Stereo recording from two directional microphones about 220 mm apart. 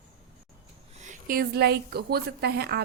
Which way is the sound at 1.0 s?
35° right (ahead or behind).